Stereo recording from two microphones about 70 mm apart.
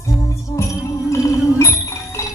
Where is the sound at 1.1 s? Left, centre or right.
Left.